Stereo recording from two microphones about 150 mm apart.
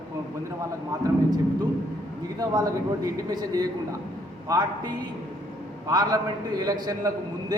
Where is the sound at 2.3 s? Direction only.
25° right (ahead or behind).